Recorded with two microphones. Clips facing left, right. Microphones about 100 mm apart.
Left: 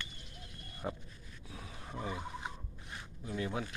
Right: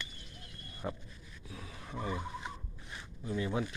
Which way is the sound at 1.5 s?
5° left (ahead or behind).